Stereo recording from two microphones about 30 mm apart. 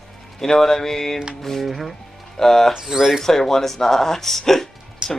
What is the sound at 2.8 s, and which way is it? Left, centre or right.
Speech, centre.